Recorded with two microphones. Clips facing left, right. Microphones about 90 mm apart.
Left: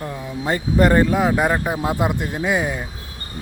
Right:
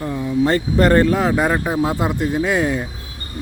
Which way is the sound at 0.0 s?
5° left (ahead or behind).